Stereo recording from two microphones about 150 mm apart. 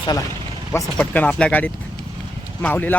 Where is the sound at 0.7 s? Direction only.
15° left (ahead or behind).